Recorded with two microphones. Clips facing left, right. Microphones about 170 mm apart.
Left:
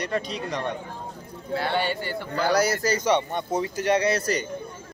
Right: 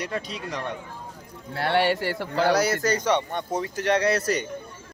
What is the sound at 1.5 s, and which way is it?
Speech, 70° right (ahead or behind).